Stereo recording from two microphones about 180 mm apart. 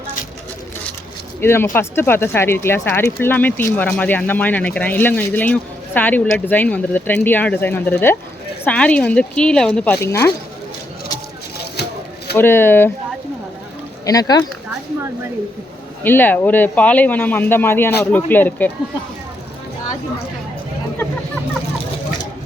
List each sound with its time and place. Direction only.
1.4 s speech: 15° left (ahead or behind)
11.8 s a sound: 65° left (ahead or behind)
12.4 s speech: 10° left (ahead or behind)
14.0 s speech: 20° left (ahead or behind)
16.0 s speech: 10° left (ahead or behind)